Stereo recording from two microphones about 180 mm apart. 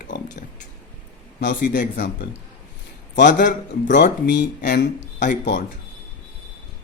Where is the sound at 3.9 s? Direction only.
75° left (ahead or behind).